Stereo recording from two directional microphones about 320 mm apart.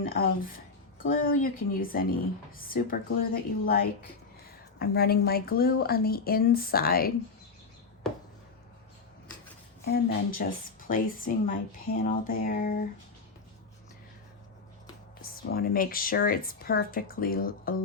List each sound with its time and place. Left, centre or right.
0.0 s speech: left
4.8 s speech: left
9.8 s speech: left
15.2 s speech: left